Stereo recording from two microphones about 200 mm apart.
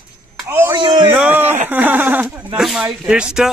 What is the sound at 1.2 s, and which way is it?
Speech, 10° right (ahead or behind).